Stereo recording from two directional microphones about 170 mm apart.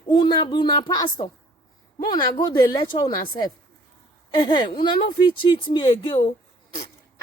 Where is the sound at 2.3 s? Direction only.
25° left (ahead or behind).